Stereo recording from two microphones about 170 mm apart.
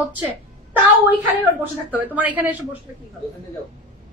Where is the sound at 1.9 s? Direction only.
10° right (ahead or behind).